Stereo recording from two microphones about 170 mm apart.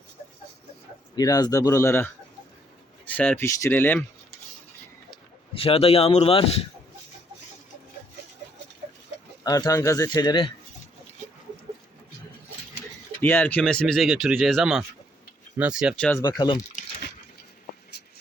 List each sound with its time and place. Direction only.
1.1 s speech: 25° left (ahead or behind)
3.1 s speech: 10° left (ahead or behind)
5.5 s speech: 35° left (ahead or behind)
9.4 s speech: 20° left (ahead or behind)
13.2 s speech: 10° left (ahead or behind)
16.2 s speech: 25° left (ahead or behind)
18.0 s a sound: 75° left (ahead or behind)